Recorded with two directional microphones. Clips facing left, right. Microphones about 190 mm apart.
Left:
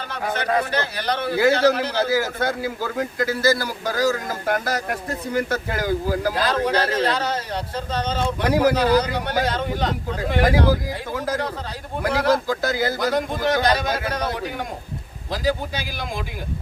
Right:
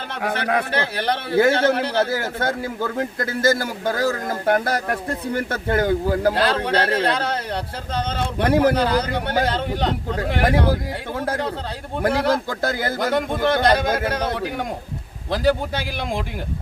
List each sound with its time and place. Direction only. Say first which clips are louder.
0.3 s a man's voice: even; 65° right (ahead or behind)
8.1 s a man's voice: right 2 dB; 55° right (ahead or behind)